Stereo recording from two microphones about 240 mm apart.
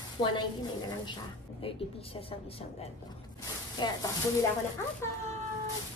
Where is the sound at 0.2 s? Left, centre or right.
Centre.